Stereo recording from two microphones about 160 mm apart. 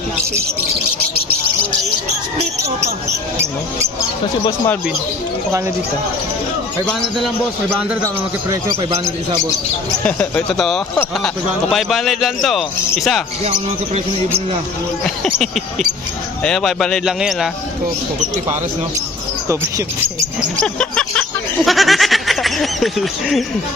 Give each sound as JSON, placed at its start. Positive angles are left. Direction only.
{"t": 8.0, "sound": "speech", "side_deg": -20}
{"t": 10.0, "sound": "speech", "side_deg": 10}
{"t": 15.0, "sound": "speech", "side_deg": 5}
{"t": 20.6, "sound": "a sound", "side_deg": 5}